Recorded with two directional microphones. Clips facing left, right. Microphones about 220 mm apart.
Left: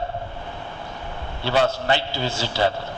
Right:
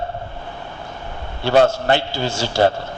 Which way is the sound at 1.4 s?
50° right (ahead or behind).